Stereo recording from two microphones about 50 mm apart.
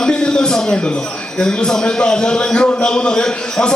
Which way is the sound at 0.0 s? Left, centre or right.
Centre.